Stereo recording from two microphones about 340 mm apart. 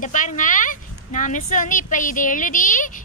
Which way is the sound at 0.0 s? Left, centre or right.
Left.